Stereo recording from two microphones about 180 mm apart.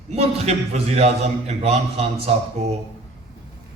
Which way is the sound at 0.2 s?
35° right (ahead or behind).